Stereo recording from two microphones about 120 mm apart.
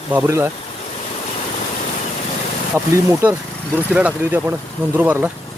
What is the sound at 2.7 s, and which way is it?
Speech, 20° right (ahead or behind).